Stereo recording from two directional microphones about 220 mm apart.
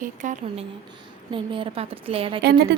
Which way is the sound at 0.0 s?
35° right (ahead or behind).